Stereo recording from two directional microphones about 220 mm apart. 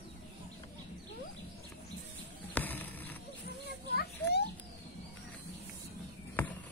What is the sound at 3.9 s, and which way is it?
Children playing, 45° left (ahead or behind).